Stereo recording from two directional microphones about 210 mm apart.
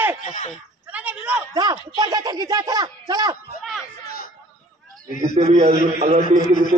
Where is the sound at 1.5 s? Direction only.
20° right (ahead or behind).